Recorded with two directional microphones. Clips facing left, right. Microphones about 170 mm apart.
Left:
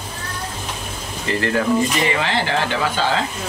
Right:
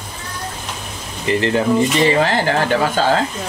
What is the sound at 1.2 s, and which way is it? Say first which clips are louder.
Speech: right 3 dB; 20° right (ahead or behind).